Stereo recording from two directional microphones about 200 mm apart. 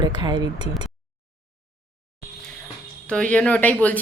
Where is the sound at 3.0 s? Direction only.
5° left (ahead or behind).